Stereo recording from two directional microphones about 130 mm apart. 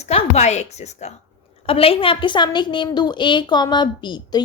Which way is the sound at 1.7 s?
45° left (ahead or behind).